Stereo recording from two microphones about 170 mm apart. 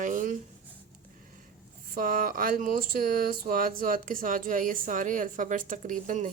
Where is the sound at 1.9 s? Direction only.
55° right (ahead or behind).